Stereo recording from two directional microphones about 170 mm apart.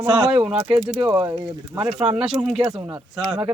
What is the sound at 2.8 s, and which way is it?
Speech, 20° right (ahead or behind).